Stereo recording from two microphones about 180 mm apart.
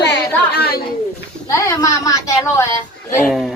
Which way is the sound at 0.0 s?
65° left (ahead or behind).